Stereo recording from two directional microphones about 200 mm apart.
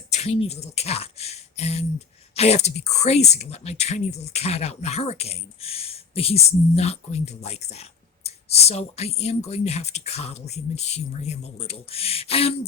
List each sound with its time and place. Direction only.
0.1 s speech: 30° left (ahead or behind)